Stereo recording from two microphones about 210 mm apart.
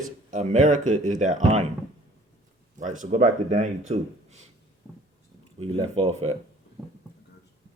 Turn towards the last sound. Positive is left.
turn(degrees=-30)  # may be behind; listen again after turning